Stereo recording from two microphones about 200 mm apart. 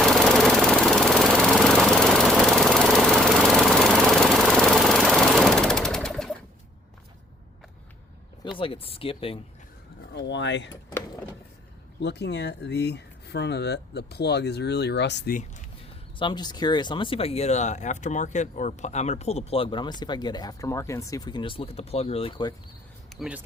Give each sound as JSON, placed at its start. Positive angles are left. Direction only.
{"t": 0.0, "sound": "jackhammer", "side_deg": 0}
{"t": 8.5, "sound": "speech", "side_deg": 25}
{"t": 10.2, "sound": "speech", "side_deg": 60}
{"t": 11.9, "sound": "speech", "side_deg": 55}
{"t": 16.1, "sound": "speech", "side_deg": 25}
{"t": 23.2, "sound": "speech", "side_deg": 0}